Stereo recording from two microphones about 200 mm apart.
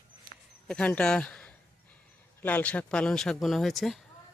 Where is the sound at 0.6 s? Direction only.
5° left (ahead or behind).